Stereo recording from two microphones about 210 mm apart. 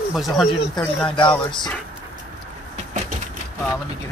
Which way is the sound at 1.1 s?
20° left (ahead or behind).